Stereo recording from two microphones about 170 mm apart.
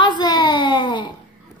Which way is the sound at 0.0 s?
25° left (ahead or behind).